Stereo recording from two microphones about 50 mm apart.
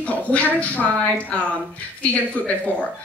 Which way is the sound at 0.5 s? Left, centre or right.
Left.